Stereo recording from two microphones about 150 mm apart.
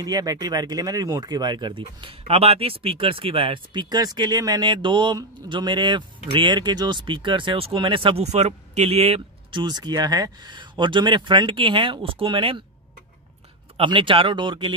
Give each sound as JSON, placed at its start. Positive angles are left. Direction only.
{"t": 0.0, "sound": "speech", "side_deg": -25}
{"t": 13.7, "sound": "speech", "side_deg": -35}